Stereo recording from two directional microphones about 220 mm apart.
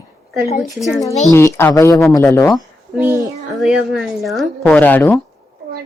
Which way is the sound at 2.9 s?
10° right (ahead or behind).